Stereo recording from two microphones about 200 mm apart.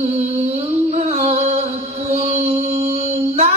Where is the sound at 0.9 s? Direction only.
40° right (ahead or behind).